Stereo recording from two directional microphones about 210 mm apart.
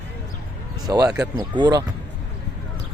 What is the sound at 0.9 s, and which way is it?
Speech, 20° right (ahead or behind).